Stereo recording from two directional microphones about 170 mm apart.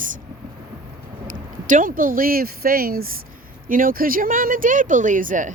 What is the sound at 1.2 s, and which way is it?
Speech, 50° right (ahead or behind).